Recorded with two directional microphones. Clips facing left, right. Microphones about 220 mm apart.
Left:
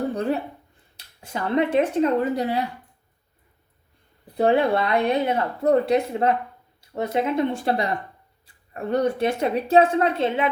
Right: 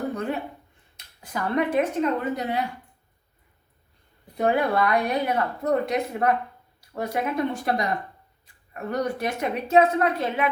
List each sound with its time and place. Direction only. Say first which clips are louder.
0.1 s speech: left 4 dB; 35° left (ahead or behind)
4.4 s speech: left 3 dB; 30° left (ahead or behind)